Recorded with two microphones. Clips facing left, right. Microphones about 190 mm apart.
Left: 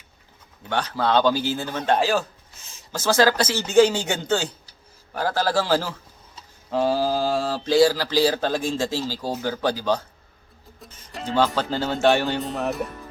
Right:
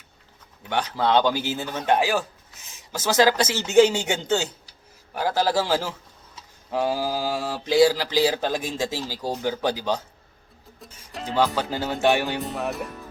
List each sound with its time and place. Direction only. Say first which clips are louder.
0.7 s a woman's voice: even; 20° right (ahead or behind)
10.8 s music: even; centre (ahead or behind)
11.3 s speech: left 1 dB; 15° right (ahead or behind)